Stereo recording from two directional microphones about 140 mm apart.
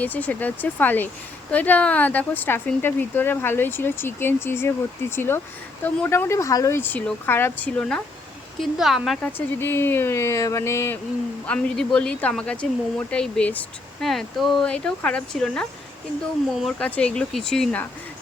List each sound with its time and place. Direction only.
0.0 s speech: 10° left (ahead or behind)
8.6 s speech: centre (ahead or behind)
9.2 s speech: 15° left (ahead or behind)
11.4 s speech: 5° left (ahead or behind)